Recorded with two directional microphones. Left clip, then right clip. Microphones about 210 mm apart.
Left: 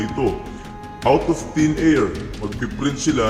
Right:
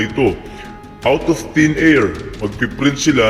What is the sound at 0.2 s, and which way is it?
A man's voice, 25° right (ahead or behind).